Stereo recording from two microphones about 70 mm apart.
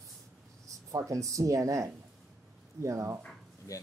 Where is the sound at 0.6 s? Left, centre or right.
Right.